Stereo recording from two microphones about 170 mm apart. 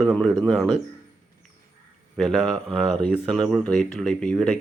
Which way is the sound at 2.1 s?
Centre (ahead or behind).